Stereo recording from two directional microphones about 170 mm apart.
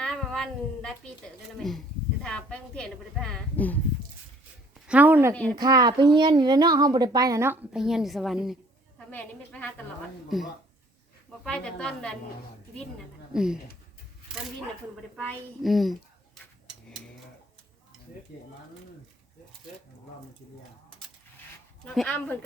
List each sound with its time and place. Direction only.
0.0 s a woman's voice: 5° left (ahead or behind)
4.9 s speech: 10° right (ahead or behind)
5.3 s a woman's voice: 10° left (ahead or behind)
5.5 s a woman's voice: 25° right (ahead or behind); by 9.8 s 10° left (ahead or behind)
10.2 s a woman's voice: centre (ahead or behind)
13.3 s a woman's voice: 5° right (ahead or behind)
15.1 s a woman's voice: centre (ahead or behind)
21.8 s a woman's voice: 5° left (ahead or behind)